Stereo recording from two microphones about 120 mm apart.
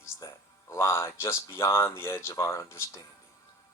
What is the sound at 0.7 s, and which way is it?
Speech, 20° left (ahead or behind).